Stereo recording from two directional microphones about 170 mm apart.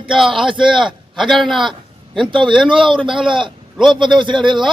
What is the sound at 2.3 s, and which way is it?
Speech, 30° right (ahead or behind).